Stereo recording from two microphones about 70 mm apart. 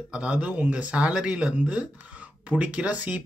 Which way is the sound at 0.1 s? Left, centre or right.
Centre.